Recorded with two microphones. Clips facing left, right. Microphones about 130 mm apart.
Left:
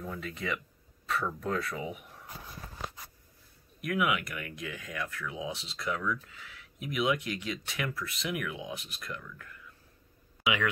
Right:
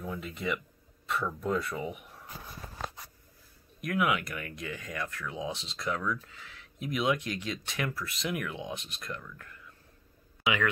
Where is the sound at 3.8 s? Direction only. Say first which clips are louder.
Right 1 dB; 5° left (ahead or behind).